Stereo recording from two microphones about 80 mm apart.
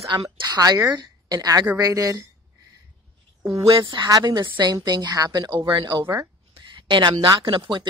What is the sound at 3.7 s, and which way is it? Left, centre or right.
A woman's voice, right.